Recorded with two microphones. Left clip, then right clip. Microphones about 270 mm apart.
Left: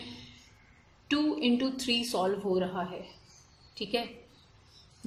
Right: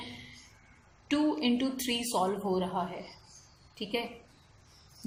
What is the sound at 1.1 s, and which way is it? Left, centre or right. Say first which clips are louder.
A woman's voice: left 1 dB; left.